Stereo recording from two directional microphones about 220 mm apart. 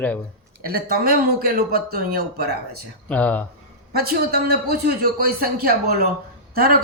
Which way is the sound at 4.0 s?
45° right (ahead or behind).